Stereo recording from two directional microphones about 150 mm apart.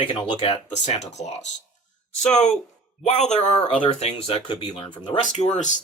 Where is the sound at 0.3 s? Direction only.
50° left (ahead or behind).